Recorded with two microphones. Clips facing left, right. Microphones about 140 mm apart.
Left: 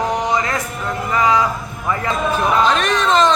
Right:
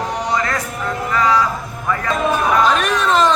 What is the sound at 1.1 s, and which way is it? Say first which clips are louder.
Music: left 1 dB; 20° left (ahead or behind).